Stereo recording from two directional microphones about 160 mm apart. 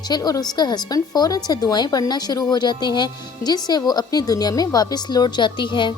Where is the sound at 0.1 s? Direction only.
25° left (ahead or behind).